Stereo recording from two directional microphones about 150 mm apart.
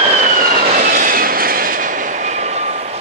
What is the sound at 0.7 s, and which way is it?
Train, 70° right (ahead or behind).